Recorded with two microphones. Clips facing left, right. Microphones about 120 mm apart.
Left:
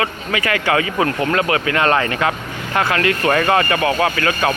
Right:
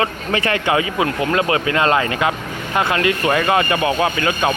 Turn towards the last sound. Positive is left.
turn(degrees=-20)  # may be behind; listen again after turning